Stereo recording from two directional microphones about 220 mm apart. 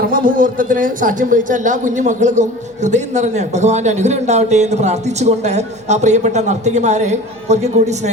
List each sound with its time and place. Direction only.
0.1 s speech: 40° right (ahead or behind)